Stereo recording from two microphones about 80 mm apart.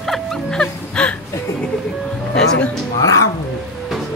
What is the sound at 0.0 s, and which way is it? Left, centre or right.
Music, centre.